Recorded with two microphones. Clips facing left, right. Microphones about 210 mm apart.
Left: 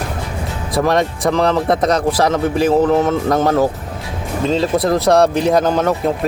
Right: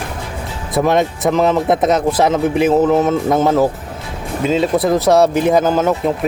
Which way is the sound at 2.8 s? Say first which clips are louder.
Right 1 dB; 5° right (ahead or behind).